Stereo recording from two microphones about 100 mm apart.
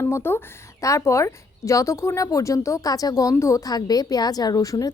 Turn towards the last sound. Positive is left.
turn(degrees=35)  # may be behind; listen again after turning